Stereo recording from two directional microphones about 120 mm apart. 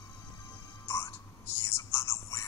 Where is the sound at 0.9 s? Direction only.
20° left (ahead or behind).